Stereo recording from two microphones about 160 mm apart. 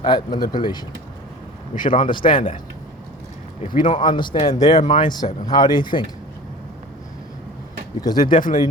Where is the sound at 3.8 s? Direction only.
30° left (ahead or behind).